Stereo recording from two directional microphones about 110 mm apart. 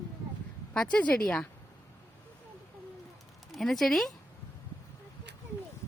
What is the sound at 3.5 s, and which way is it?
Speech, centre (ahead or behind).